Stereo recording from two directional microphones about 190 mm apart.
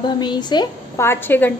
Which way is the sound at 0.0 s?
25° left (ahead or behind).